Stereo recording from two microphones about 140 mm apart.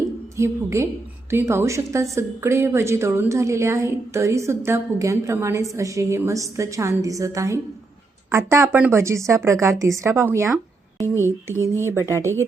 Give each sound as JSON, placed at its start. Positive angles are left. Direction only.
{"t": 0.3, "sound": "a woman's voice", "side_deg": -20}